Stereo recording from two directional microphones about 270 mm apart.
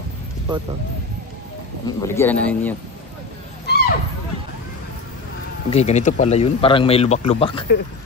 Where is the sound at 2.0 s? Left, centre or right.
Centre.